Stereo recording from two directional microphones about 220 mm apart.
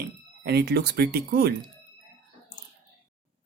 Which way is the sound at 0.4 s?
45° right (ahead or behind).